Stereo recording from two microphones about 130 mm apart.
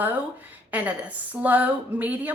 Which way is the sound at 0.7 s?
10° right (ahead or behind).